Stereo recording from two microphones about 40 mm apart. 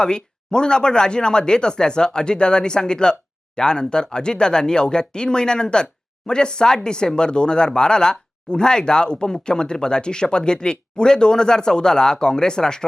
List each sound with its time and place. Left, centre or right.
0.0 s speech: left